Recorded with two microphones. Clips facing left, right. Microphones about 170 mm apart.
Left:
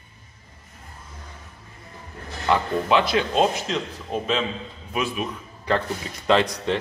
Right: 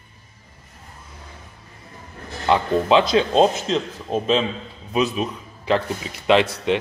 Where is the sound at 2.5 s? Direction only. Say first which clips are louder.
Right 4 dB; 25° right (ahead or behind).